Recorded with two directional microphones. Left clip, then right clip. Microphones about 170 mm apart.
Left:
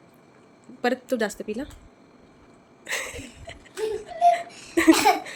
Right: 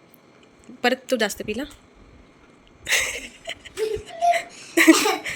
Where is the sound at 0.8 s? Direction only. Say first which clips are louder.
Right 3 dB; centre (ahead or behind).